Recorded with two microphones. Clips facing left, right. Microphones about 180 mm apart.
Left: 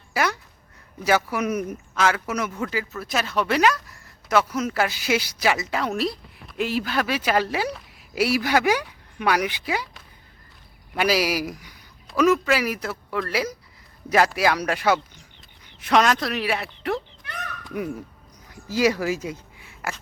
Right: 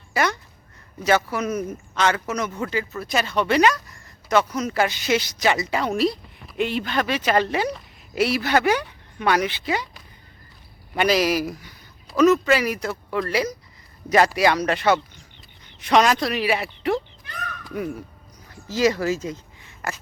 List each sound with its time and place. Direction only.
0.1 s speech: 5° left (ahead or behind)
17.7 s speech: 15° left (ahead or behind)